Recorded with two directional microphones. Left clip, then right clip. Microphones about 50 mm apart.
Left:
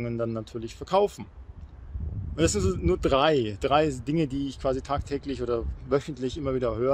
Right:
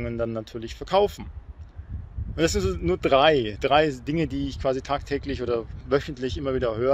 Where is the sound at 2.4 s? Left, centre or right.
Left.